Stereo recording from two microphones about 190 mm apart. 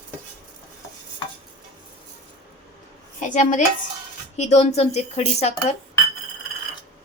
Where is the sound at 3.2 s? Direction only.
40° left (ahead or behind).